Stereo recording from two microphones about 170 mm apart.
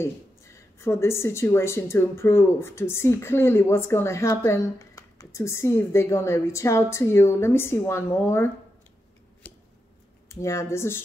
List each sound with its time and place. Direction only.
0.7 s speech: 15° left (ahead or behind)
9.4 s scissors: 10° left (ahead or behind)
10.2 s speech: 15° left (ahead or behind)